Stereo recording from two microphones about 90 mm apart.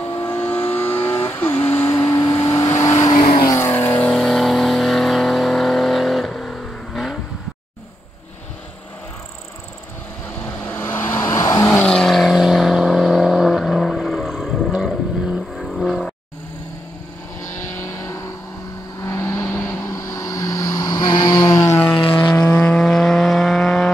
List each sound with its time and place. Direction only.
0.2 s vehicle: 20° left (ahead or behind)
4.1 s vehicle: 5° left (ahead or behind)
10.7 s vehicle: 25° left (ahead or behind)
11.8 s vehicle: 10° left (ahead or behind)
17.7 s vehicle: 35° left (ahead or behind)
21.7 s vehicle: 10° left (ahead or behind)